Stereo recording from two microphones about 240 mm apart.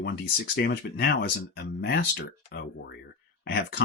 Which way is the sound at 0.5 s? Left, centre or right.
Left.